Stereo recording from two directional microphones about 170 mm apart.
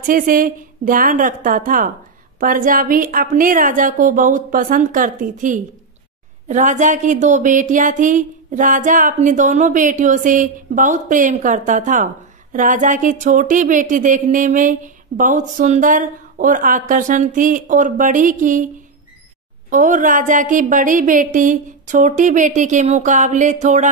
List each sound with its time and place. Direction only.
0.0 s speech: 55° right (ahead or behind)
19.7 s speech: 50° right (ahead or behind)